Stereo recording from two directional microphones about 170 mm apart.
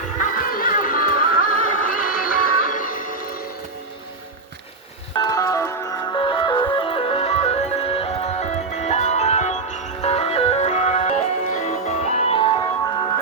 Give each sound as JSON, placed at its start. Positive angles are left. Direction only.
{"t": 0.6, "sound": "music", "side_deg": 55}
{"t": 5.1, "sound": "a sound", "side_deg": 20}
{"t": 6.1, "sound": "music", "side_deg": 30}